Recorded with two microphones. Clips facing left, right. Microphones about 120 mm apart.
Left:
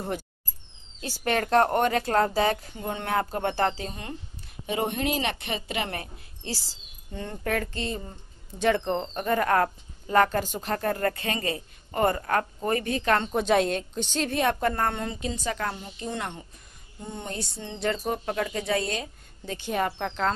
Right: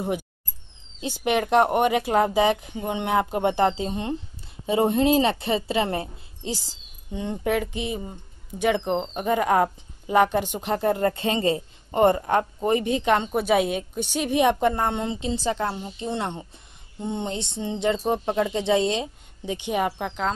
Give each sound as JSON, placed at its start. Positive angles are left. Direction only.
{"t": 1.0, "sound": "a woman's voice", "side_deg": -15}
{"t": 6.4, "sound": "speech", "side_deg": -15}
{"t": 15.6, "sound": "speech", "side_deg": -15}
{"t": 16.0, "sound": "speech", "side_deg": -30}